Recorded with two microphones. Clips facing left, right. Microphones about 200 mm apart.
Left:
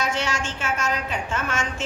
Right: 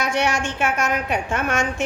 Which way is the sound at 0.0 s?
60° right (ahead or behind).